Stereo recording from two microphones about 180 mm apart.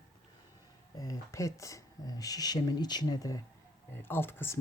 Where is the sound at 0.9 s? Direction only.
20° left (ahead or behind).